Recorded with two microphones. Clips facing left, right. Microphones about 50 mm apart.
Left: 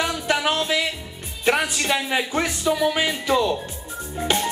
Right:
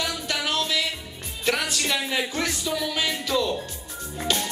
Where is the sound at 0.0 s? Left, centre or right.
Left.